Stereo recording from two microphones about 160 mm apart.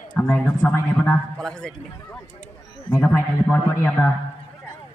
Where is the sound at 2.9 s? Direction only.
15° left (ahead or behind).